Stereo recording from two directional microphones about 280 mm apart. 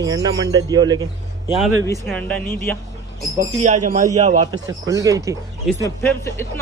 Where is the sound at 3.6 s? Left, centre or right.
Right.